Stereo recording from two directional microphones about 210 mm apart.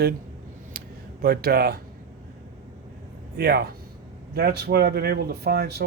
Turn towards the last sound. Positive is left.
turn(degrees=-50)  # may be behind; listen again after turning